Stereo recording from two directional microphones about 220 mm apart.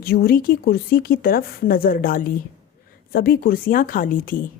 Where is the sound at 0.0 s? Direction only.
45° left (ahead or behind).